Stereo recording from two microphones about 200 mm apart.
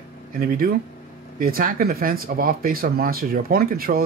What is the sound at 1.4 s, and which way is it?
Speech, 45° right (ahead or behind).